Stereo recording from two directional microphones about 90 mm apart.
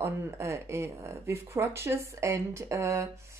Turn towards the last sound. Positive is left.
turn(degrees=-30)  # may be behind; listen again after turning